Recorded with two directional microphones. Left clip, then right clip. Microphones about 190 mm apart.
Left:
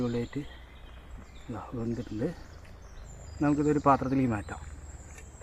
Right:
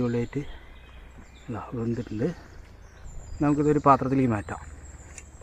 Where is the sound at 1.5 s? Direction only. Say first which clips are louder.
Right 4 dB; 35° right (ahead or behind).